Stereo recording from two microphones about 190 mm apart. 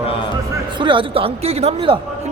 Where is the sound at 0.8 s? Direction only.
25° right (ahead or behind).